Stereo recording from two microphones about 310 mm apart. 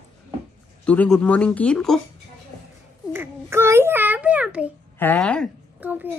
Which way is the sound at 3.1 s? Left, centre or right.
Centre.